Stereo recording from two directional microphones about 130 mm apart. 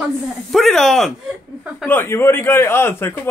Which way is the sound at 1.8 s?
15° left (ahead or behind).